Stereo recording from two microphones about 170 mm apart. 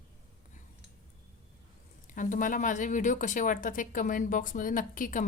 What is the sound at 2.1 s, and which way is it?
Speech, 50° left (ahead or behind).